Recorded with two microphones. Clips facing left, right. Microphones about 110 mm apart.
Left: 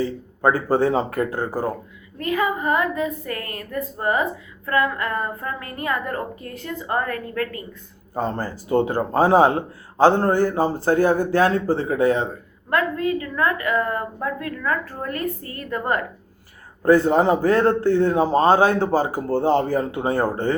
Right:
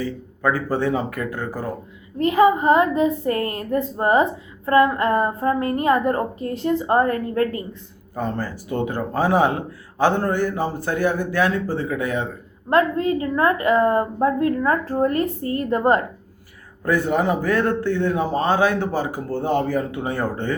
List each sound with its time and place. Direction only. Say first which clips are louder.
0.0 s speech: left 3 dB; 35° left (ahead or behind)
2.1 s a woman's voice: right 7 dB; 25° right (ahead or behind)
8.1 s a man's voice: left 1 dB; 30° left (ahead or behind)
12.7 s a woman's voice: right 3 dB; 30° right (ahead or behind)
16.8 s a man's voice: left 4 dB; 30° left (ahead or behind)